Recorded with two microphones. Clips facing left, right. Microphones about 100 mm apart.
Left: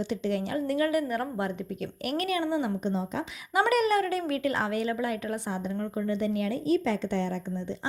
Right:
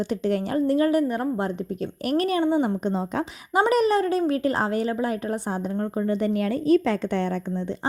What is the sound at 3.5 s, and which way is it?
A woman's voice, 30° right (ahead or behind).